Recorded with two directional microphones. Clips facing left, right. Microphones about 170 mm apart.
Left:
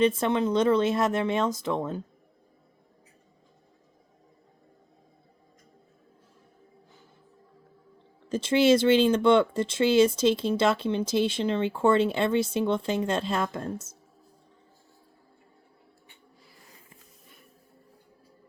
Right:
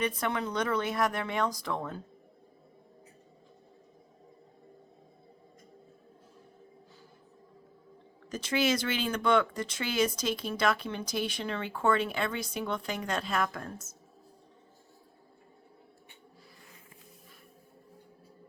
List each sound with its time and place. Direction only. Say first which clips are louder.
0.0 s speech: left 8 dB; 25° left (ahead or behind)
8.3 s speech: left 8 dB; 25° left (ahead or behind)